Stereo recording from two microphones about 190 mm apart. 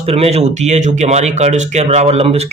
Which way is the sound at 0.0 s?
35° right (ahead or behind).